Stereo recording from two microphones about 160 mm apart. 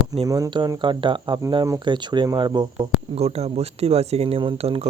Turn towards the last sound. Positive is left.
turn(degrees=-35)  # may be behind; listen again after turning